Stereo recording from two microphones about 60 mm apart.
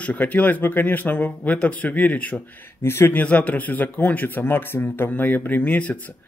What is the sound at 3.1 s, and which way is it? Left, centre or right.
Speech, left.